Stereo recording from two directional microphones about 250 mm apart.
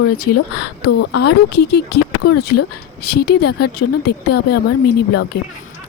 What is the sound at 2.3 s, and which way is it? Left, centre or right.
Speech, left.